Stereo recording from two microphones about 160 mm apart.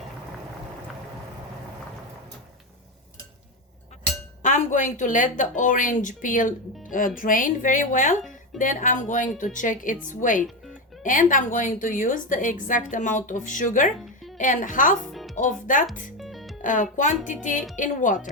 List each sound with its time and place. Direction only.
4.4 s a woman's voice: 50° left (ahead or behind)
15.1 s music: centre (ahead or behind)
15.4 s speech: 55° left (ahead or behind)
16.1 s music: centre (ahead or behind)
16.6 s a woman's voice: 55° left (ahead or behind)